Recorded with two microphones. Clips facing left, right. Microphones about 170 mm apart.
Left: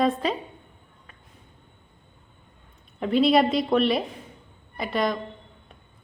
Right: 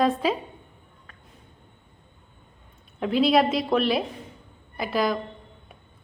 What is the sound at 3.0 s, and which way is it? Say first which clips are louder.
A woman's voice: left 1 dB; centre (ahead or behind).